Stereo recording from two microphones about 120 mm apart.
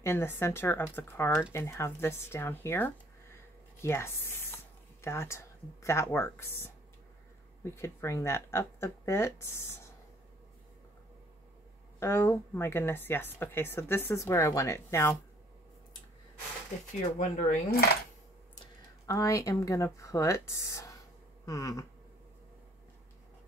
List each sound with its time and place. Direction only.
0.0 s speech: 20° left (ahead or behind)
12.0 s speech: 20° left (ahead or behind)
17.2 s speech: 90° left
19.0 s speech: 25° left (ahead or behind)